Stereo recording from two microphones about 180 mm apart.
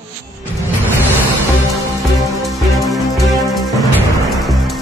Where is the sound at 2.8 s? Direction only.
Centre (ahead or behind).